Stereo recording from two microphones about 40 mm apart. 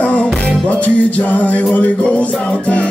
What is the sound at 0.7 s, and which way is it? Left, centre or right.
Music, left.